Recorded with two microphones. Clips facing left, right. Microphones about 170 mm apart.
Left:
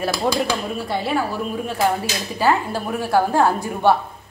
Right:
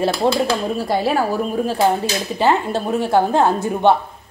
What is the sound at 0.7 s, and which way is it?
Speech, 40° right (ahead or behind).